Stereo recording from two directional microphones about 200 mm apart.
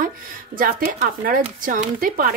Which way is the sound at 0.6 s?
45° right (ahead or behind).